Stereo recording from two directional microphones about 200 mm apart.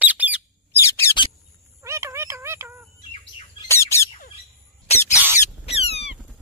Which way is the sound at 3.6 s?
15° left (ahead or behind).